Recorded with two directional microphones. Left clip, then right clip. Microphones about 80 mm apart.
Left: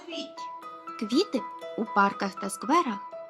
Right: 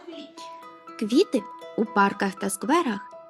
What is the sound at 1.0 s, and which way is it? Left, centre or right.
Speech, right.